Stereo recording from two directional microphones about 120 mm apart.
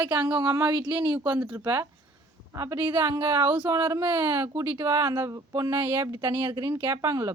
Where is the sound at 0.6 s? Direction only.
40° right (ahead or behind).